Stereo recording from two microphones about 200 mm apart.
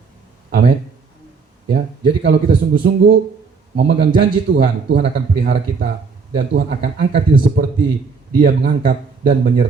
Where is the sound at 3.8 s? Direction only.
55° right (ahead or behind).